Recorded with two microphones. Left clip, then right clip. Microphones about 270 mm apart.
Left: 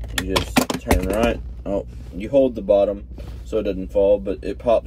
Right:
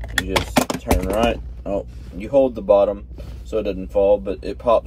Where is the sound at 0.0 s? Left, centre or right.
Centre.